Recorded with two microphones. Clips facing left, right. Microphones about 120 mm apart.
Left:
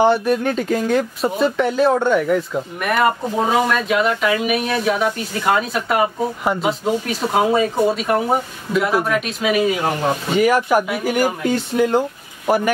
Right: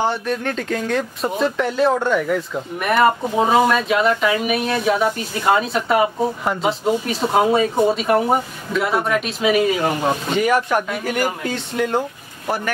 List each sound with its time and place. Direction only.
0.0 s speech: 10° left (ahead or behind)
12.4 s speech: 15° left (ahead or behind)